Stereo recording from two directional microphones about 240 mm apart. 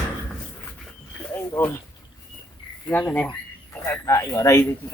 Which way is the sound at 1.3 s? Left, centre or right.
Centre.